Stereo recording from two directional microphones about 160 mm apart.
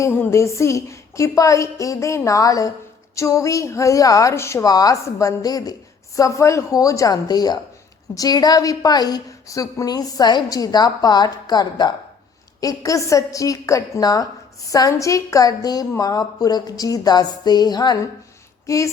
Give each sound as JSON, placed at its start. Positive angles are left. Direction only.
{"t": 0.0, "sound": "a woman's voice", "side_deg": 15}